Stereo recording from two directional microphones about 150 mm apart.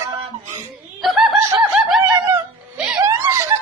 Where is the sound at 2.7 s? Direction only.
10° right (ahead or behind).